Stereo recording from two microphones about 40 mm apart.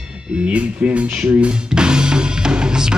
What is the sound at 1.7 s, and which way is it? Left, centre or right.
Music, right.